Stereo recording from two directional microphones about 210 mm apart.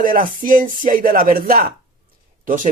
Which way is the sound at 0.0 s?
40° right (ahead or behind).